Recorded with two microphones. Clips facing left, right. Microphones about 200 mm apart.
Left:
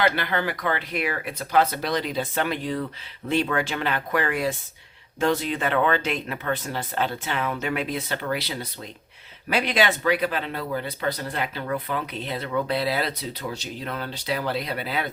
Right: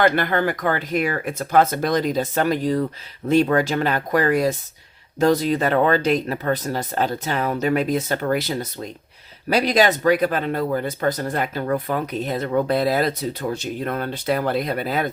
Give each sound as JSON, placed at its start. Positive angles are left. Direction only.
{"t": 0.0, "sound": "speech", "side_deg": -50}